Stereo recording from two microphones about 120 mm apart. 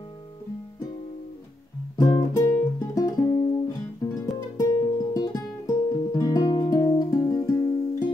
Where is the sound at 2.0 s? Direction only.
25° left (ahead or behind).